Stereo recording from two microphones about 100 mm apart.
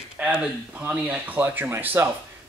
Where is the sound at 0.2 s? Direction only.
15° right (ahead or behind).